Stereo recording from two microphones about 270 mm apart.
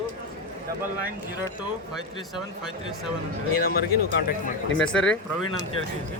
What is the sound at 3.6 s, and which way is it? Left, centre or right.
Speech, left.